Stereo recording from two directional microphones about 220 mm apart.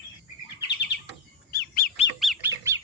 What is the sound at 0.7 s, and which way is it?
Bird, 50° left (ahead or behind).